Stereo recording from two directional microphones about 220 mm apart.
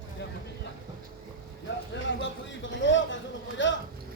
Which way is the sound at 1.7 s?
55° left (ahead or behind).